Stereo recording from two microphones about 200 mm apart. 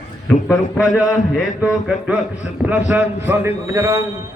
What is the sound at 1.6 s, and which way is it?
A man's voice, 5° right (ahead or behind).